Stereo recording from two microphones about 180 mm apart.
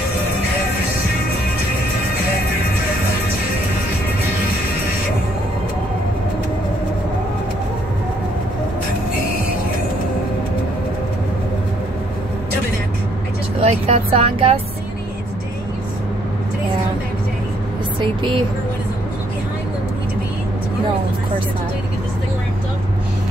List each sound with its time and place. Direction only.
13.6 s speech: 30° right (ahead or behind)